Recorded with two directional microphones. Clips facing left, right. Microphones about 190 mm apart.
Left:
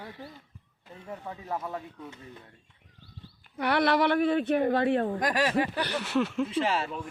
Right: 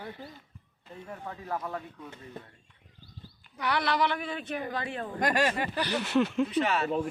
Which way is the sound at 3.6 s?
55° left (ahead or behind).